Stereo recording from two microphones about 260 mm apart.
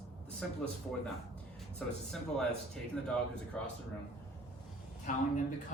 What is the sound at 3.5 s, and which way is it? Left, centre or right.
Speech, centre.